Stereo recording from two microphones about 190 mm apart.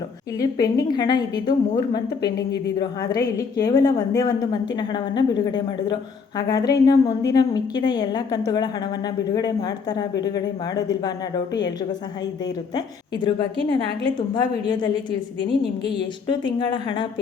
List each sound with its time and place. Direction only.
0.3 s a woman's voice: 20° left (ahead or behind)
15.4 s a woman's voice: 65° left (ahead or behind)
16.5 s a woman's voice: 25° left (ahead or behind)